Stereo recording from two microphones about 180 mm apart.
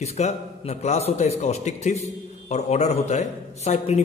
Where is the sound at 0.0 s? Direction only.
35° left (ahead or behind).